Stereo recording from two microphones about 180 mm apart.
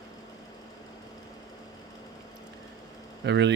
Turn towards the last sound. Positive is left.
turn(degrees=-75)  # may be behind; listen again after turning